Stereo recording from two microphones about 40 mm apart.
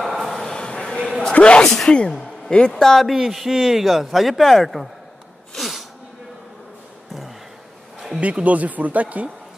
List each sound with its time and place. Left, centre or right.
0.0 s a sound: centre
0.5 s a sound: centre
1.3 s speech: left
1.6 s speech: centre
1.9 s speech: left
2.7 s speech: centre
3.1 s speech: centre
5.6 s sneeze: centre
8.2 s speech: right